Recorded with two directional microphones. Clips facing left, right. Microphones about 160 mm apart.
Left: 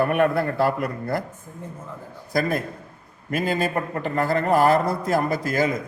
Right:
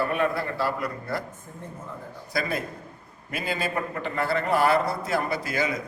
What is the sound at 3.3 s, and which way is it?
A man's voice, 45° left (ahead or behind).